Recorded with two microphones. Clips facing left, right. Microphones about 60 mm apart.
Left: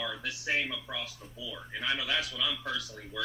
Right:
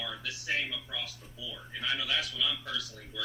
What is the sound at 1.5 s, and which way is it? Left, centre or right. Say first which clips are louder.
Speech: left 1 dB; centre.